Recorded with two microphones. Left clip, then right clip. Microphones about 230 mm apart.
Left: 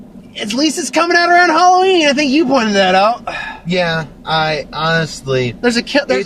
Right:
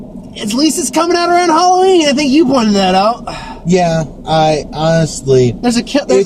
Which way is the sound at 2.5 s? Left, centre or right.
Left.